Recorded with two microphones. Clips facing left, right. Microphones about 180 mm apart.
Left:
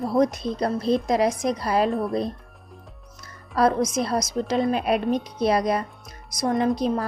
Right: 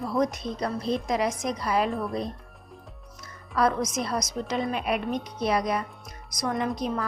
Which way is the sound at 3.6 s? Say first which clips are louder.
Left 4 dB; 30° left (ahead or behind).